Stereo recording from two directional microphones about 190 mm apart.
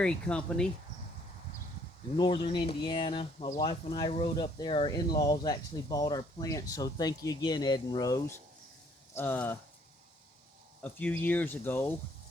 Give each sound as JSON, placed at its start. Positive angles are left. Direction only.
{"t": 0.0, "sound": "speech", "side_deg": 5}
{"t": 2.1, "sound": "speech", "side_deg": 25}
{"t": 10.8, "sound": "speech", "side_deg": 10}